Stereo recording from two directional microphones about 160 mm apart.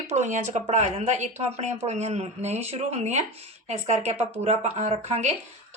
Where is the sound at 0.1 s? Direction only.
50° right (ahead or behind).